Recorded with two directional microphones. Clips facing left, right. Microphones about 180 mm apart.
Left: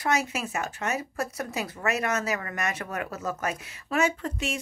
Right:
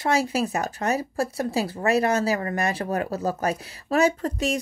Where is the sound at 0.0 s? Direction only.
30° right (ahead or behind).